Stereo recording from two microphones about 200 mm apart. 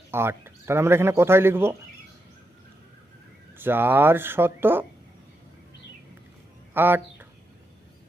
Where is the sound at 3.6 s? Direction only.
10° right (ahead or behind).